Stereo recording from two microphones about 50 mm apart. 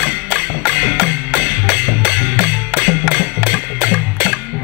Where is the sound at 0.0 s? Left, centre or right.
Right.